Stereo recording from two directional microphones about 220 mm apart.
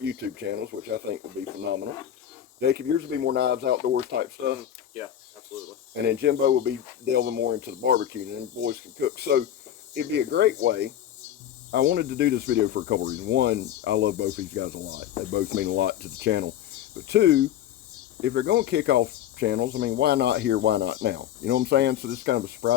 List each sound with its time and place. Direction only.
0.0 s speech: 50° right (ahead or behind)
2.6 s speech: 50° right (ahead or behind)
6.1 s speech: 45° right (ahead or behind)